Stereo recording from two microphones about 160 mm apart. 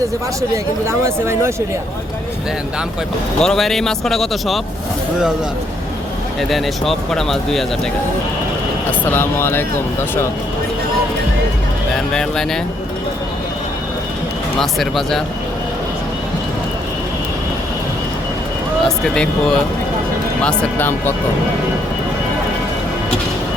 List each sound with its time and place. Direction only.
0.5 s speech: 15° right (ahead or behind)
3.4 s a man's voice: centre (ahead or behind)
6.5 s a man's voice: centre (ahead or behind)
8.9 s speech: 15° left (ahead or behind)
11.9 s a man's voice: 5° left (ahead or behind)
14.6 s a man's voice: centre (ahead or behind)
18.9 s a man's voice: 5° left (ahead or behind)